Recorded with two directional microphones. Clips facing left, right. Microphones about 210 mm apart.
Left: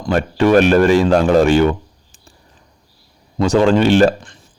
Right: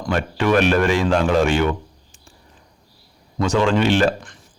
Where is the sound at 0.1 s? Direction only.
35° left (ahead or behind).